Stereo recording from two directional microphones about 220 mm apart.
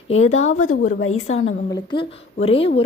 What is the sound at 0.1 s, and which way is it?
Speech, 30° left (ahead or behind).